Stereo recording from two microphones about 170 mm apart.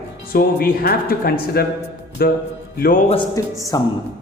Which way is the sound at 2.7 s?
60° left (ahead or behind).